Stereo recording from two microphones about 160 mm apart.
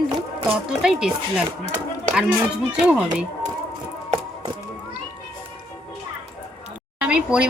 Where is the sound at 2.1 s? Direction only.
10° right (ahead or behind).